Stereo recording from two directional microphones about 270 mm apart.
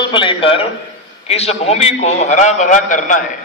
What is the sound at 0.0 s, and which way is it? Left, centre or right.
A man's voice, centre.